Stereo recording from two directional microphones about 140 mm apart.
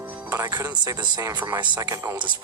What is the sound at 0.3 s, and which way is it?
Speech, 20° right (ahead or behind).